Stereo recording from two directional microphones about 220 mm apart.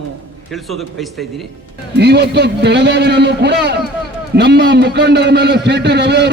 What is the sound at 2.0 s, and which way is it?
A man's voice, 50° right (ahead or behind).